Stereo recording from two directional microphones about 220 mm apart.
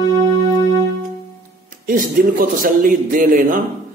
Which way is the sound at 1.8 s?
40° right (ahead or behind).